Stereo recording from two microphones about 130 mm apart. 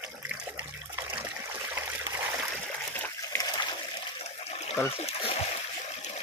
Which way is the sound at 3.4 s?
35° left (ahead or behind).